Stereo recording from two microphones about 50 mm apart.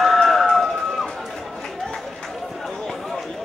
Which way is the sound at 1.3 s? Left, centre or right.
Centre.